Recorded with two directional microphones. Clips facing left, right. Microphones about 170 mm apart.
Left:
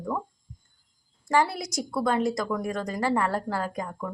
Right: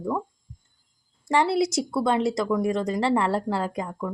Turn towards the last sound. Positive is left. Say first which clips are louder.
# right 3 dB
turn(degrees=-20)  # may be behind; listen again after turning